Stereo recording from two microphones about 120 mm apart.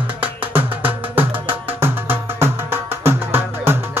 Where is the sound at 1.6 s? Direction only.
20° right (ahead or behind).